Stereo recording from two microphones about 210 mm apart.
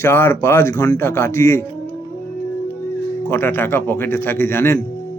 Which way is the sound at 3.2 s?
10° left (ahead or behind).